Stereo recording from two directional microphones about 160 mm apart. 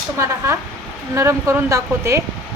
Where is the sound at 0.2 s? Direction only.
20° right (ahead or behind).